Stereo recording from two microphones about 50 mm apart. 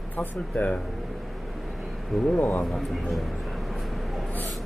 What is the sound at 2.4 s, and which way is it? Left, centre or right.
Speech, left.